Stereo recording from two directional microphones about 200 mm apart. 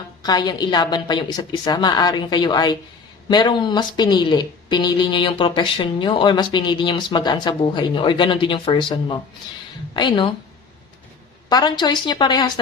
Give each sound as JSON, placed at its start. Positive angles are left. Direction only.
{"t": 0.2, "sound": "a woman's voice", "side_deg": 20}
{"t": 11.4, "sound": "a woman's voice", "side_deg": 20}